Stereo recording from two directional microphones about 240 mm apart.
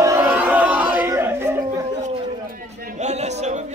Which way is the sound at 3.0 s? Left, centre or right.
Right.